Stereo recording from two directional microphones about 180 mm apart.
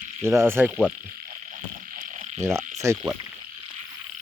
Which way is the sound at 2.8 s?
15° right (ahead or behind).